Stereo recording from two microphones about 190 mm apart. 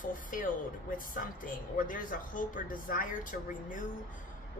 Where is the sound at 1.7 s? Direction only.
45° left (ahead or behind).